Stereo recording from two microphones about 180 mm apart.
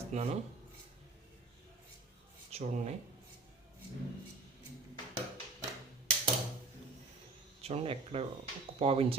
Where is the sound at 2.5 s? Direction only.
35° right (ahead or behind).